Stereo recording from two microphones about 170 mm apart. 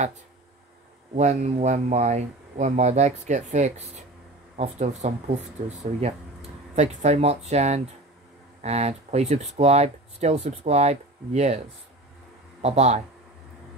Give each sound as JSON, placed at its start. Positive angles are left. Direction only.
{"t": 1.1, "sound": "speech", "side_deg": -40}
{"t": 12.6, "sound": "speech", "side_deg": -40}